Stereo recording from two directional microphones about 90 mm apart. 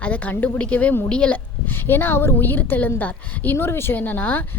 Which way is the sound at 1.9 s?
25° left (ahead or behind).